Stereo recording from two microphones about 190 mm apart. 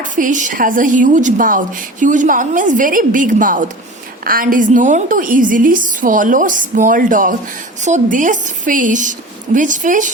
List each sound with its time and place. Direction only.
0.0 s a woman's voice: 40° right (ahead or behind)